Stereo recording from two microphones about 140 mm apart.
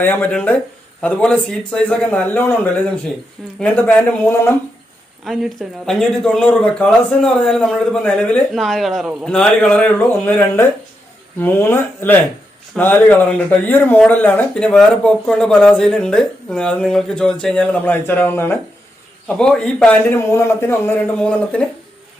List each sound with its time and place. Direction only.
0.0 s speech: 15° left (ahead or behind)
5.2 s speech: centre (ahead or behind); by 20.9 s 15° left (ahead or behind)
21.2 s speech: 5° left (ahead or behind)